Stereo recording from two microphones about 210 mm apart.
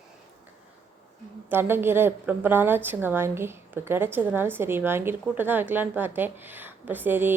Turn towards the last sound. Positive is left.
turn(degrees=-10)  # may be behind; listen again after turning